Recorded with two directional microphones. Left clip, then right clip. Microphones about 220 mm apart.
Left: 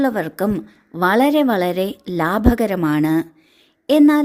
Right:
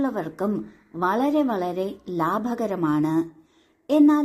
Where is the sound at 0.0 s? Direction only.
45° left (ahead or behind).